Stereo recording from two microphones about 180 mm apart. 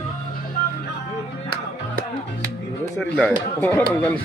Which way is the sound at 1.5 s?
55° right (ahead or behind).